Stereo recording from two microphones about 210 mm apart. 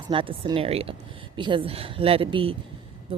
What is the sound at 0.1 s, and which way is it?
Speech, 25° right (ahead or behind).